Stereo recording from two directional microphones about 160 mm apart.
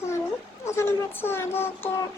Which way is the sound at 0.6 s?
15° left (ahead or behind).